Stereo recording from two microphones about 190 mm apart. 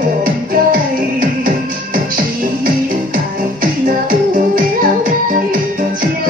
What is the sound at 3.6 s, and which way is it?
Music, 45° right (ahead or behind).